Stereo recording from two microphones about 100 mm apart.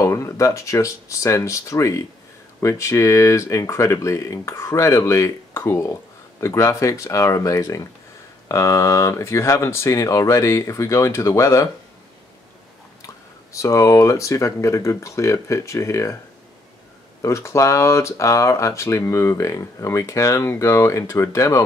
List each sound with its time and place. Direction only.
0.0 s speech: 30° left (ahead or behind)
13.0 s speech: 30° left (ahead or behind)
17.2 s speech: 30° left (ahead or behind)